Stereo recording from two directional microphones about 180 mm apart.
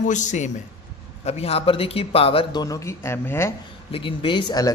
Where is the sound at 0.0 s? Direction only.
45° left (ahead or behind); by 3.5 s 15° left (ahead or behind).